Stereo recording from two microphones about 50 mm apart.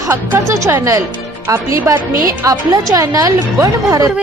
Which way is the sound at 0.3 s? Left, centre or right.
Right.